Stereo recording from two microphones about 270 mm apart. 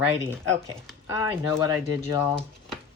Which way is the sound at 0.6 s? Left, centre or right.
Centre.